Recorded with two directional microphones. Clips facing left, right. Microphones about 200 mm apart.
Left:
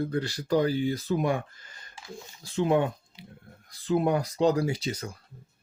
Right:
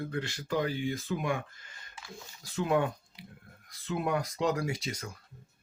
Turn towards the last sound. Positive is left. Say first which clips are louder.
# left 6 dB
turn(degrees=30)  # may be behind; listen again after turning